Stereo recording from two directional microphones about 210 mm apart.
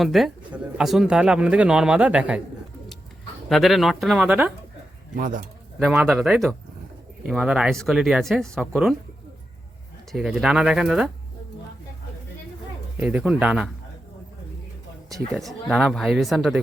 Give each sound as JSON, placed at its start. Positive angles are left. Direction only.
{"t": 0.0, "sound": "speech", "side_deg": 0}
{"t": 3.5, "sound": "speech", "side_deg": 0}
{"t": 5.1, "sound": "speech", "side_deg": -40}
{"t": 5.8, "sound": "speech", "side_deg": -5}
{"t": 10.1, "sound": "speech", "side_deg": -5}
{"t": 13.0, "sound": "speech", "side_deg": -5}
{"t": 15.3, "sound": "speech", "side_deg": 0}